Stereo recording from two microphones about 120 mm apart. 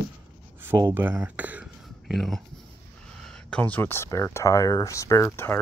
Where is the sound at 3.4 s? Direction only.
10° left (ahead or behind).